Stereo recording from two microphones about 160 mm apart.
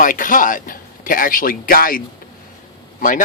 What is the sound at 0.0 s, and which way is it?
A man's voice, 55° left (ahead or behind).